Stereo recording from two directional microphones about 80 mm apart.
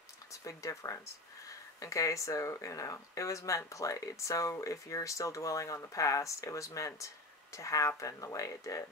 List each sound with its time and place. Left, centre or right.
0.3 s speech: left